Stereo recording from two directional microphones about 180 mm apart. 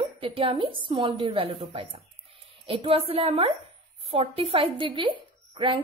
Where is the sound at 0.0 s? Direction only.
30° right (ahead or behind).